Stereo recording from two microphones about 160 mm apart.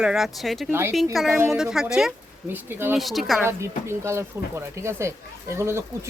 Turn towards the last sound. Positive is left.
turn(degrees=-15)  # may be behind; listen again after turning